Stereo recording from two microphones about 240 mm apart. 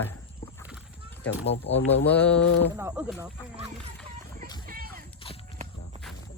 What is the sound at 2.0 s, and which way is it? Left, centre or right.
Speech, centre.